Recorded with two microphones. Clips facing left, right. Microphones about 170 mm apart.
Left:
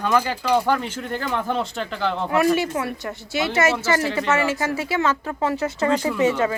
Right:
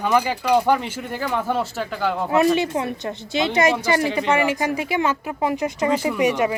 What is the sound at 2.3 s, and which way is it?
A woman's voice, 20° right (ahead or behind).